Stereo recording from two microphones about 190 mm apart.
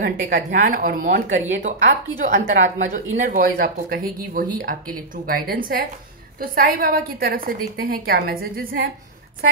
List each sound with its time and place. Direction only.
0.0 s speech: 45° right (ahead or behind)